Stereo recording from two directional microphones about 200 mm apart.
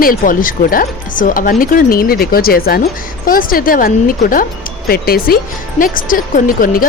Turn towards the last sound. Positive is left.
turn(degrees=45)  # may be behind; listen again after turning